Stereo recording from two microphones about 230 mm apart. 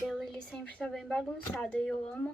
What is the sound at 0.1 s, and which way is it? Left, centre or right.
A woman's voice, centre.